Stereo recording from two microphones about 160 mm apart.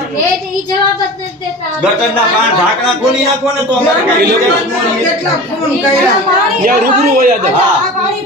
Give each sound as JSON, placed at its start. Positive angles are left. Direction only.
{"t": 6.6, "sound": "a woman's voice", "side_deg": -60}